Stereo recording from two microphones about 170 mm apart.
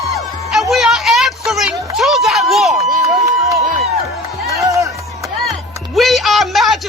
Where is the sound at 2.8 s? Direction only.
40° right (ahead or behind).